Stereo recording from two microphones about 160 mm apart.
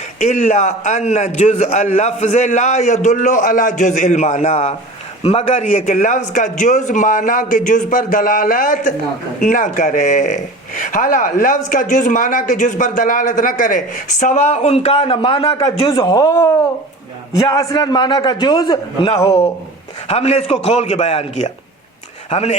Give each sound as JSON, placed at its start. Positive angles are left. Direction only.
{"t": 0.2, "sound": "a man's voice", "side_deg": 50}
{"t": 20.1, "sound": "a man's voice", "side_deg": 40}